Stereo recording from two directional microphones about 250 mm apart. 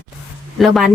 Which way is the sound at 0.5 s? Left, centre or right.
Centre.